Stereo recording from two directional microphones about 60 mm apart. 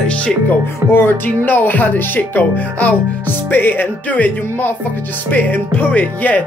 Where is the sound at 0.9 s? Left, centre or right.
Left.